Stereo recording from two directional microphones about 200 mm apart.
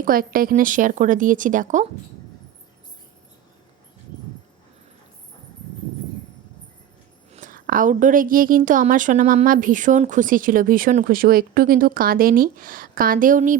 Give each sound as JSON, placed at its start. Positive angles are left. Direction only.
{"t": 0.0, "sound": "speech", "side_deg": -45}
{"t": 7.3, "sound": "a woman's voice", "side_deg": -45}